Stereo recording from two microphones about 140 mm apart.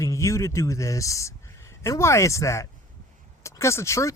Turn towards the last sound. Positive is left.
turn(degrees=20)  # may be behind; listen again after turning